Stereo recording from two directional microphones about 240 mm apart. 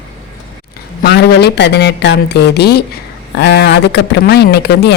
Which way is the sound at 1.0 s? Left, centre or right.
Left.